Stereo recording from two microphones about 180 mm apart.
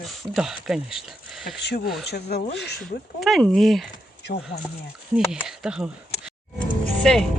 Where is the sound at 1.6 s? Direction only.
60° left (ahead or behind).